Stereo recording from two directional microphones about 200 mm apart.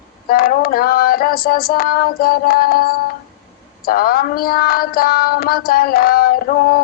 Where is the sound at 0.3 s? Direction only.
45° left (ahead or behind).